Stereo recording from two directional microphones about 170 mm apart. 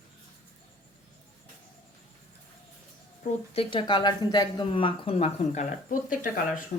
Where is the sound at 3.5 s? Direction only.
30° left (ahead or behind).